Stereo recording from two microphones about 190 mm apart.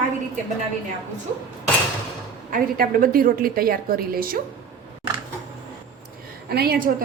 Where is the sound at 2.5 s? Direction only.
50° right (ahead or behind).